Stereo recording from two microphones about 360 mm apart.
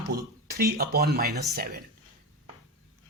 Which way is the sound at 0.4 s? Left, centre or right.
Right.